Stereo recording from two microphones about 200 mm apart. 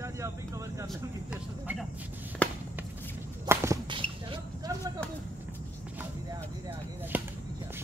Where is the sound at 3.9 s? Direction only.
25° right (ahead or behind).